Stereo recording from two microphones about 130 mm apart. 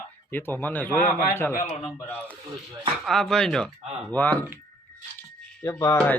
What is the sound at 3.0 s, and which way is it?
Speech, 5° left (ahead or behind).